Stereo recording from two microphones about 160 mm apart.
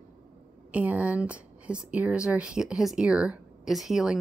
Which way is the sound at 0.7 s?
10° right (ahead or behind).